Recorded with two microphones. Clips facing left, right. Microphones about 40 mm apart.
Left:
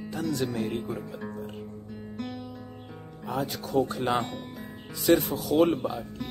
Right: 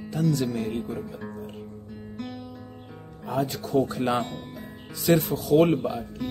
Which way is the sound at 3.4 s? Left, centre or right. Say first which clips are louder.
Right 3 dB; centre.